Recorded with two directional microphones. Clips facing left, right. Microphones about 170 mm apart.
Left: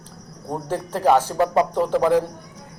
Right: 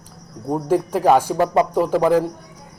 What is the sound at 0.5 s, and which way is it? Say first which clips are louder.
A man's voice: right 7 dB; 10° right (ahead or behind).